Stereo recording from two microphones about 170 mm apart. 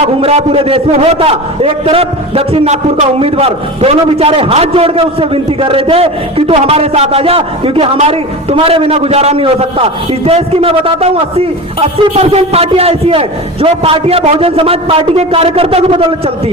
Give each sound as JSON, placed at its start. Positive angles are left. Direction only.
{"t": 0.0, "sound": "a man's voice", "side_deg": -35}